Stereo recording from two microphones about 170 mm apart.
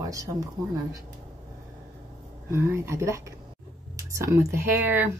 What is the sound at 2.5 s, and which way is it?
Speech, 15° right (ahead or behind).